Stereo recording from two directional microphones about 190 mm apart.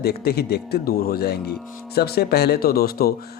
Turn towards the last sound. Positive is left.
turn(degrees=55)  # may be behind; listen again after turning